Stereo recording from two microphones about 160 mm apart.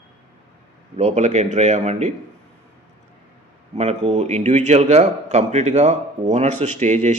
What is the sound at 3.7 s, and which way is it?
A man's voice, 40° right (ahead or behind).